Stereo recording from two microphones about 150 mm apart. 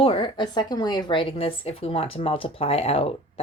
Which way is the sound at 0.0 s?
35° left (ahead or behind).